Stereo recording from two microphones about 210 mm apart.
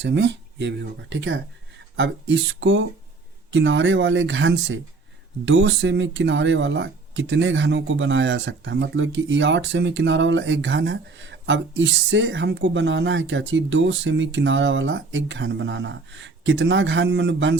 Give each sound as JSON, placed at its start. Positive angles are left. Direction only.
{"t": 0.0, "sound": "speech", "side_deg": -55}